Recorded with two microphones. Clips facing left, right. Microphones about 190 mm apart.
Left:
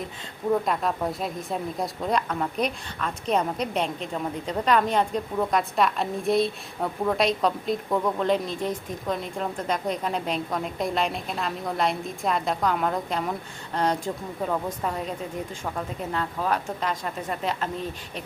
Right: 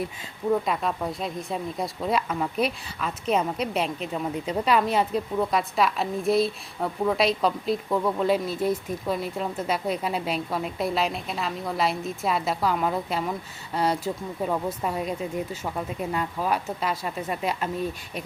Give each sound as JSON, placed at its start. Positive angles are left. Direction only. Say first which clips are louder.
{"t": 0.6, "sound": "a woman's voice", "louder": "left 1 dB", "side_deg": 0}